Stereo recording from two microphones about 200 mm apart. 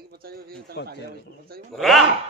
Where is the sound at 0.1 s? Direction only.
50° right (ahead or behind).